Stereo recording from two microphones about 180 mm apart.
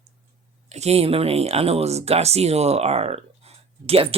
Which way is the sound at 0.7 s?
35° right (ahead or behind).